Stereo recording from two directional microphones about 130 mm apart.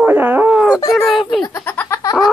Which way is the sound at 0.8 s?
25° left (ahead or behind).